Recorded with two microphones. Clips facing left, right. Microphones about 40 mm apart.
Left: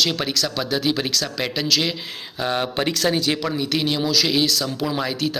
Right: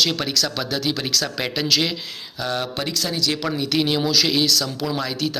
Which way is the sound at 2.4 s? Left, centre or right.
Left.